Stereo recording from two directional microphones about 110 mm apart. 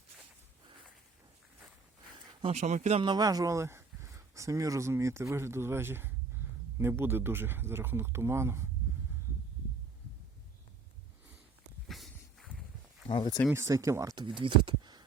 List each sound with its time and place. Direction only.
2.4 s speech: 80° right
3.0 s speech: 40° right (ahead or behind); by 8.6 s 25° right (ahead or behind)
11.9 s walk: centre (ahead or behind)
13.1 s speech: 45° left (ahead or behind)
13.5 s speech: 25° right (ahead or behind)
14.2 s speech: 50° right (ahead or behind)